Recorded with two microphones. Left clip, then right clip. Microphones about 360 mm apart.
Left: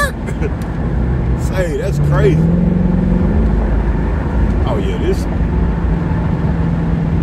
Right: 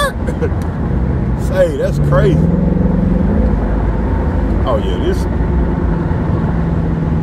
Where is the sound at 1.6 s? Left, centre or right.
Centre.